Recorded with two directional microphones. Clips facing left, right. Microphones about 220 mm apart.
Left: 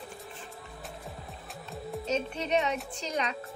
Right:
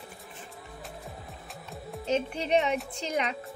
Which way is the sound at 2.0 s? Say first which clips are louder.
Right 3 dB; 30° right (ahead or behind).